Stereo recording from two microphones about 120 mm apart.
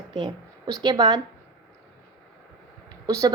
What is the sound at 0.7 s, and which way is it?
Speech, 35° right (ahead or behind).